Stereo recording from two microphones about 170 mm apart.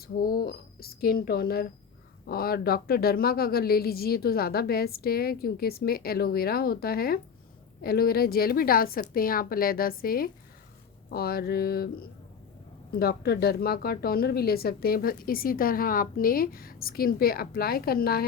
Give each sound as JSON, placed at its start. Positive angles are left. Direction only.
{"t": 0.0, "sound": "speech", "side_deg": 60}